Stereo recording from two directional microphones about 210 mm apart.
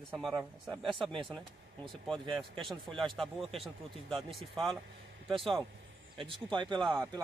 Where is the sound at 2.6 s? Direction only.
Centre (ahead or behind).